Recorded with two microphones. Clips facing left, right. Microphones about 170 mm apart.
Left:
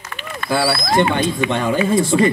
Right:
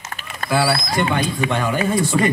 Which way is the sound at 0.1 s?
40° right (ahead or behind).